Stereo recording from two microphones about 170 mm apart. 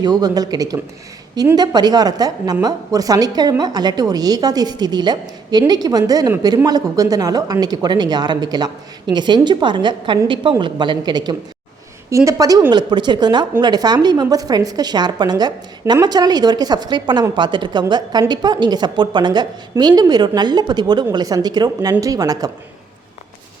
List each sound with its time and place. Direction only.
0.0 s a woman's voice: 25° right (ahead or behind)